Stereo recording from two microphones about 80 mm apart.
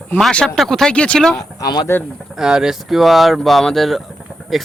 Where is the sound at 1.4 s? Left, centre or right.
Left.